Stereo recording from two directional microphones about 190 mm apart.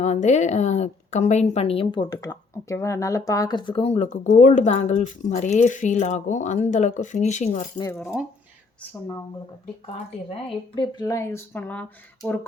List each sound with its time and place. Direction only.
0.0 s a woman's voice: 40° left (ahead or behind)
7.8 s a woman's voice: 15° left (ahead or behind)
9.8 s a woman's voice: 30° left (ahead or behind); by 11.9 s 10° left (ahead or behind)